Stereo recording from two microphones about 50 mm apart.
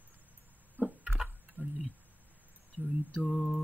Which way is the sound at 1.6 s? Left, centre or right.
Left.